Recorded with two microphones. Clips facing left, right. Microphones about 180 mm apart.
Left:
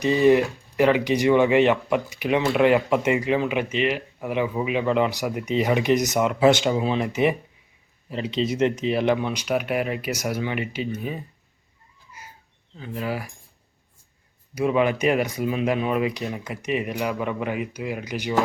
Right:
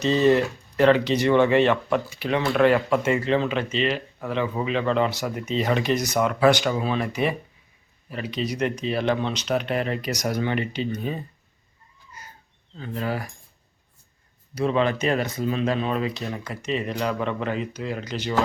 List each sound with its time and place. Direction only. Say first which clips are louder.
0.0 s speech: left 1 dB; 15° left (ahead or behind)
12.8 s speech: even; 10° left (ahead or behind)
14.5 s speech: left 1 dB; 15° left (ahead or behind)